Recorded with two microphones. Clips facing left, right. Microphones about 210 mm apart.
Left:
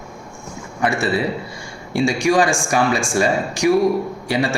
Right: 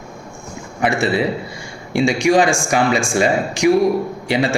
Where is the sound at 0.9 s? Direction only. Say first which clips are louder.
Right 2 dB; 20° right (ahead or behind).